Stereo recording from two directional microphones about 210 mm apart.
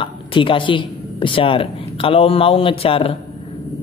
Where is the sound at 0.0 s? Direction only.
25° left (ahead or behind).